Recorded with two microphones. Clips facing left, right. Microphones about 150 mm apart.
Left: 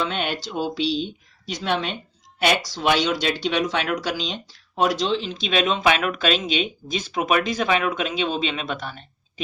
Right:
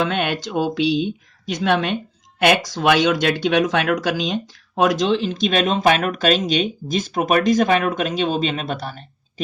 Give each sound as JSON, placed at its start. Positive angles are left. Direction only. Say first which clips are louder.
{"t": 0.0, "sound": "speech", "louder": "right 5 dB", "side_deg": -55}